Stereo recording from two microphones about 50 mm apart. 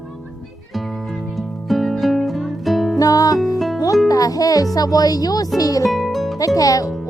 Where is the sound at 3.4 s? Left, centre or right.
Centre.